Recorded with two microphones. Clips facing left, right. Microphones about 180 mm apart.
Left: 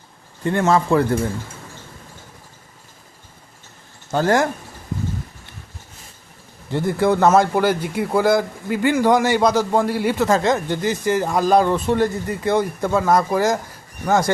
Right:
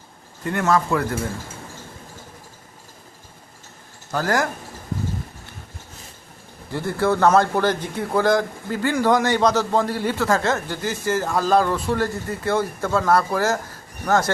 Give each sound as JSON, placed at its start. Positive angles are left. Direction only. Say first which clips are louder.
{"t": 0.4, "sound": "a man's voice", "louder": "left 3 dB", "side_deg": 25}
{"t": 4.1, "sound": "a man's voice", "louder": "left 4 dB", "side_deg": 25}
{"t": 6.7, "sound": "a man's voice", "louder": "left 3 dB", "side_deg": 20}